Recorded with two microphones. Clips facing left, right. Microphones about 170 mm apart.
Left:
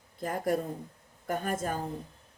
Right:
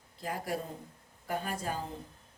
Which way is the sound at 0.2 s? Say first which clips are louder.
Left 6 dB; 50° left (ahead or behind).